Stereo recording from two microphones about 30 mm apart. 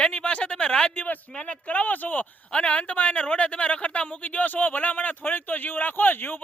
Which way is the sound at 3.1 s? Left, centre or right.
Left.